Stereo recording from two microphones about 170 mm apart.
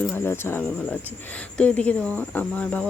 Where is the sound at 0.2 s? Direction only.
15° left (ahead or behind).